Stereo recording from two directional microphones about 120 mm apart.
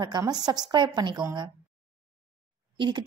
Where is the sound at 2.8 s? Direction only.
40° right (ahead or behind).